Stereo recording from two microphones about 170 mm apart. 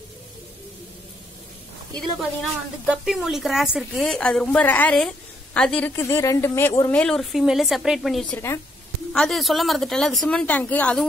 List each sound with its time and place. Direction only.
2.0 s a woman's voice: centre (ahead or behind)
5.9 s speech: 15° left (ahead or behind)
6.9 s a woman's voice: 5° left (ahead or behind)